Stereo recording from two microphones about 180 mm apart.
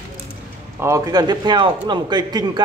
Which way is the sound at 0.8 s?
15° right (ahead or behind).